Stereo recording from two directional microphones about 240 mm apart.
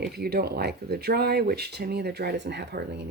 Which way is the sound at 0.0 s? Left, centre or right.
Right.